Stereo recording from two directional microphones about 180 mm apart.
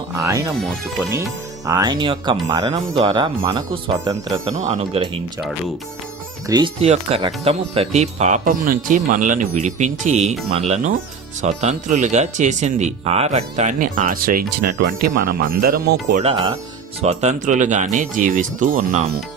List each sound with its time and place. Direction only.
0.1 s speech: 15° right (ahead or behind)
1.6 s speech: 20° right (ahead or behind)
4.5 s speech: 40° right (ahead or behind)
6.5 s speech: 20° right (ahead or behind)
6.8 s speech: 35° right (ahead or behind); by 16.2 s 55° right (ahead or behind)
16.2 s speech: 30° right (ahead or behind)